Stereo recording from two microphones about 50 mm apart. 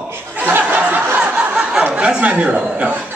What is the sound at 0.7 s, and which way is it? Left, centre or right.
Snicker, right.